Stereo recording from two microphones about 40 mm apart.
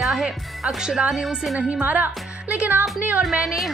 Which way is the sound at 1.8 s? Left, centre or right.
Right.